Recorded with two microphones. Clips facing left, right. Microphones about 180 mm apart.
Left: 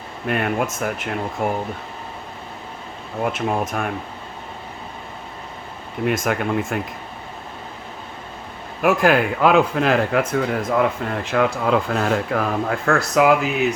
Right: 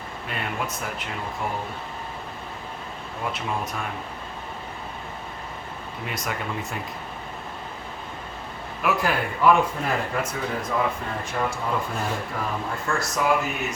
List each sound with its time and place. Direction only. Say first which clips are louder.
0.3 s speech: left 9 dB; 60° left (ahead or behind)
3.2 s speech: left 7 dB; 50° left (ahead or behind)
6.1 s speech: left 10 dB; 55° left (ahead or behind)
8.8 s a man's voice: left 7 dB; 50° left (ahead or behind)
9.0 s speech: left 3 dB; 90° left